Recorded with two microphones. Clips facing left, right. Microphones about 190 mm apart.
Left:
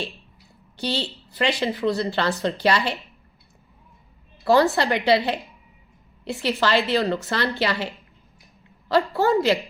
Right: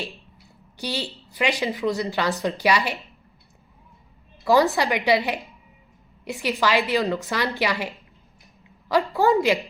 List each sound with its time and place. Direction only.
0.8 s a woman's voice: 15° right (ahead or behind)
4.4 s a woman's voice: 15° right (ahead or behind)